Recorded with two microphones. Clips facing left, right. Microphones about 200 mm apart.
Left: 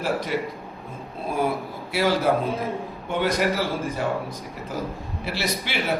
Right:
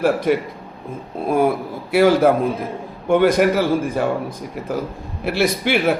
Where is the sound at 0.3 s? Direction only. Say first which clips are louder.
Right 9 dB; 55° right (ahead or behind).